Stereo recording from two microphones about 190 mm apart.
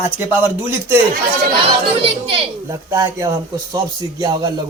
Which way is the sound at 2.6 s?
15° right (ahead or behind).